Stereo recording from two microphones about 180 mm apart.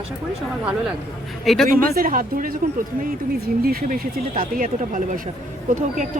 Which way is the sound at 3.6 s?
55° right (ahead or behind).